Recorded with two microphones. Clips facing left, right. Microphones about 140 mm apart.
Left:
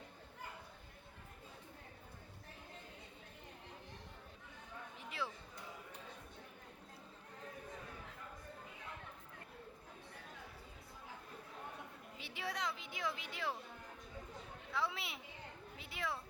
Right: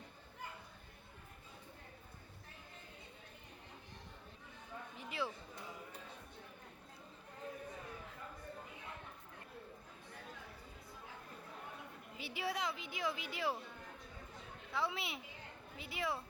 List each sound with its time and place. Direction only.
4.9 s a sound: centre (ahead or behind)
12.1 s speech: 5° right (ahead or behind)
14.7 s a woman's voice: centre (ahead or behind)